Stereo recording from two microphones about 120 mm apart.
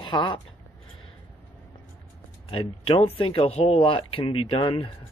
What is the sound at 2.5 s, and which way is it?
Speech, 45° left (ahead or behind).